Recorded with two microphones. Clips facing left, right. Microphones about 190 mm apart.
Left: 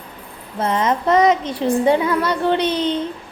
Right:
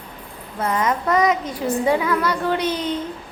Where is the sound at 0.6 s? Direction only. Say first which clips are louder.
Left 2 dB; 25° left (ahead or behind).